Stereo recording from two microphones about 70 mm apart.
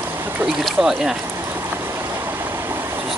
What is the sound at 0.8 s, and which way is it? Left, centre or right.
Speech, centre.